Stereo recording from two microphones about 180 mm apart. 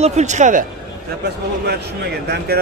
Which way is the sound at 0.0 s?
40° right (ahead or behind).